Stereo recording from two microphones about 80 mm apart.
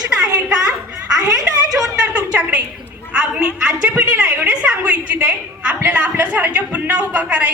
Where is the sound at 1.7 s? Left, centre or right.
Centre.